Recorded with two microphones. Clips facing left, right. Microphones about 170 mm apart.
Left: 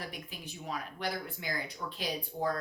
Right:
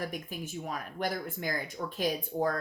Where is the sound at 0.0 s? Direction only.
45° right (ahead or behind).